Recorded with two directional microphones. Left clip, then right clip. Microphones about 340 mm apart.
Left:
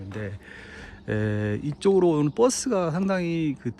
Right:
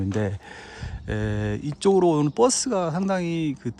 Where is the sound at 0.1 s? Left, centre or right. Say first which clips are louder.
Right 8 dB; centre.